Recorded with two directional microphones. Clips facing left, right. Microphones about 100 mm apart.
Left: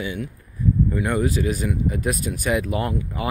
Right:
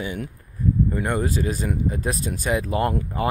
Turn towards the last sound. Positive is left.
turn(degrees=-45)  # may be behind; listen again after turning